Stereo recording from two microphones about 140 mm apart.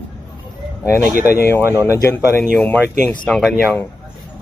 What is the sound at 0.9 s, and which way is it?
Speech, 90° left.